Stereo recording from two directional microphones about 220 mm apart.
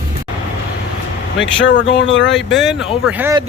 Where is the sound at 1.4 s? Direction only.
55° left (ahead or behind).